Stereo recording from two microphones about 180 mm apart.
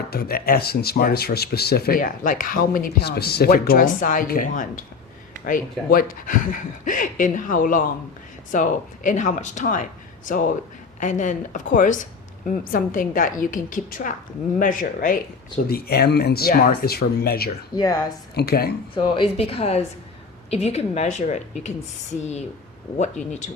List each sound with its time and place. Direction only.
0.1 s speech: 60° left (ahead or behind)
5.9 s speech: 55° left (ahead or behind)
15.7 s speech: 60° left (ahead or behind)
17.7 s speech: 20° left (ahead or behind)
18.3 s speech: 60° left (ahead or behind)
18.9 s a woman's voice: 30° left (ahead or behind)